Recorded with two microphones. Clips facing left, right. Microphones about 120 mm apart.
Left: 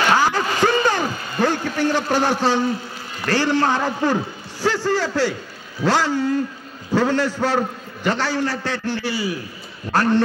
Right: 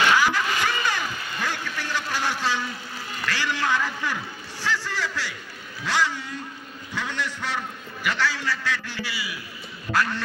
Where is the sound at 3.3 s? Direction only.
35° left (ahead or behind).